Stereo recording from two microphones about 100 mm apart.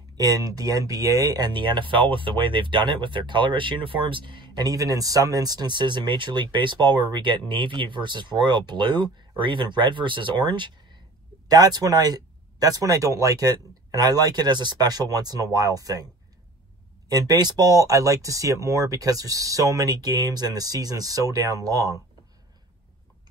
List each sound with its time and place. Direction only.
0.2 s speech: 35° right (ahead or behind)
11.4 s speech: 40° right (ahead or behind)
17.1 s speech: 40° right (ahead or behind)